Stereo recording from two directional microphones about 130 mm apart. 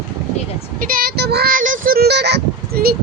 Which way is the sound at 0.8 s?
90° right.